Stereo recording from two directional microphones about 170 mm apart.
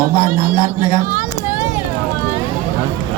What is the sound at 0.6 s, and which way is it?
Speech, 25° left (ahead or behind).